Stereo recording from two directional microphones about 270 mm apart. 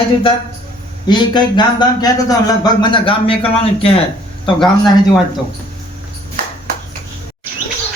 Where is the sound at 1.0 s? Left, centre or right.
Centre.